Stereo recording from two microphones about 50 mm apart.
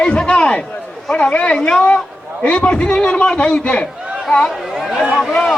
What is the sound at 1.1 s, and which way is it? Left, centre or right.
Speech, left.